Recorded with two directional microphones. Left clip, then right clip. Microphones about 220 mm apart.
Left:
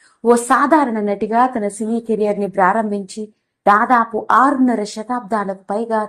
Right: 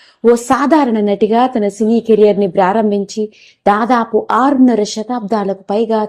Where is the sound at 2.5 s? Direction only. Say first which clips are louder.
Right 3 dB; 50° right (ahead or behind).